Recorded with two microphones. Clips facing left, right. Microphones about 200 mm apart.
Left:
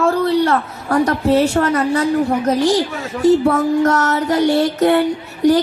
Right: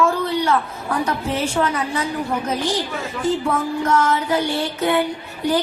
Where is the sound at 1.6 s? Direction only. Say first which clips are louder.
Left 4 dB; 55° left (ahead or behind).